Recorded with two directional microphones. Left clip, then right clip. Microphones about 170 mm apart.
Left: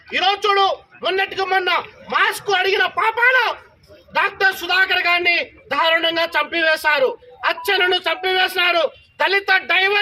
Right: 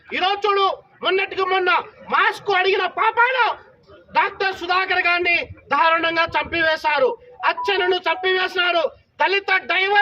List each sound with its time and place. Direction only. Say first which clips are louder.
0.1 s a man's voice: left 2 dB; 25° right (ahead or behind)